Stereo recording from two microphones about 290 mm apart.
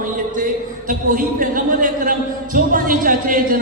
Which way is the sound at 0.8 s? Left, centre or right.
Right.